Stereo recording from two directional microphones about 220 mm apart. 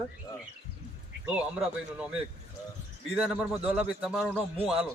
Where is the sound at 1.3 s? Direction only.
5° right (ahead or behind).